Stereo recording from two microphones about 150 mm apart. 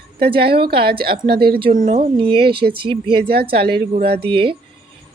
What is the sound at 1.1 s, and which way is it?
Speech, 90° right.